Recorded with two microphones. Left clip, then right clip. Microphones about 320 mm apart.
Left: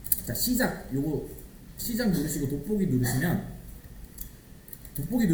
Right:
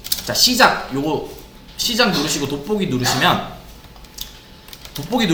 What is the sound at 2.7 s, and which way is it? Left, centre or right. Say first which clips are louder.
Speech: right 12 dB; right.